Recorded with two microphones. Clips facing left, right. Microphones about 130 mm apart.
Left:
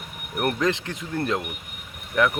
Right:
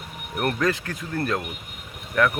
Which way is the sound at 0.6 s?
20° left (ahead or behind).